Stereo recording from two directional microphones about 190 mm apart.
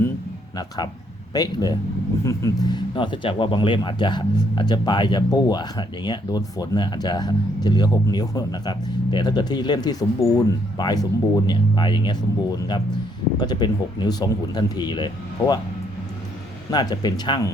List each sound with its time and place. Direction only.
1.3 s speech: 20° left (ahead or behind)
16.7 s speech: 20° left (ahead or behind)